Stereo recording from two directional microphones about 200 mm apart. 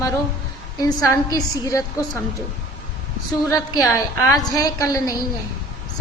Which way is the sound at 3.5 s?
15° left (ahead or behind).